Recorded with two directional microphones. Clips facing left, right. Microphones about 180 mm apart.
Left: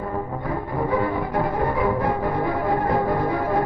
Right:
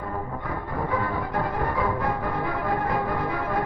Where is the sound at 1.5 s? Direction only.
25° left (ahead or behind).